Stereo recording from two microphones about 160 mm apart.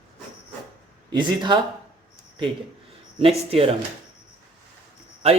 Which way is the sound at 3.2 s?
35° right (ahead or behind).